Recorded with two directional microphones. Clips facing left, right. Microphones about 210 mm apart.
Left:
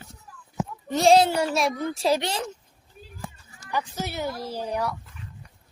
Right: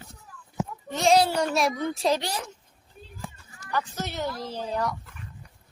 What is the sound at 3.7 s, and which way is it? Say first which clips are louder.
Speech: left 1 dB; 10° left (ahead or behind).